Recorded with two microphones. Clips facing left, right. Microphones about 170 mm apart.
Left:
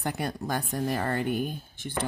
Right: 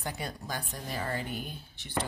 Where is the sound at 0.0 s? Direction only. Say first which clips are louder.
Left 7 dB; 55° left (ahead or behind).